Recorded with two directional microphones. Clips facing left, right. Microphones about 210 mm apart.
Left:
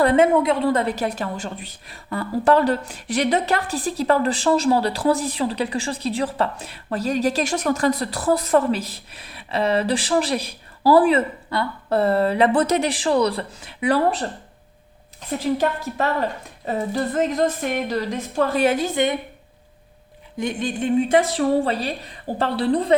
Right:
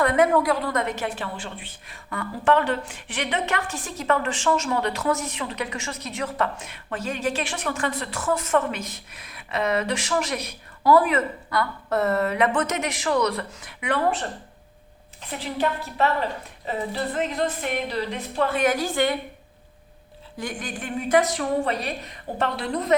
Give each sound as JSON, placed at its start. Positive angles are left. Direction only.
{"t": 0.0, "sound": "a woman's voice", "side_deg": 30}
{"t": 15.4, "sound": "speech", "side_deg": 45}
{"t": 18.6, "sound": "a woman's voice", "side_deg": 25}
{"t": 20.4, "sound": "a woman's voice", "side_deg": 25}